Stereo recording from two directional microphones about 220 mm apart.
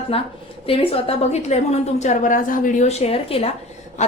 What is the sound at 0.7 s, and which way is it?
A woman's voice, 25° left (ahead or behind).